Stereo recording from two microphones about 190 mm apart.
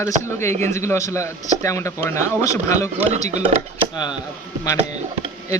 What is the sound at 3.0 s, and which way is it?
Speech, 35° right (ahead or behind).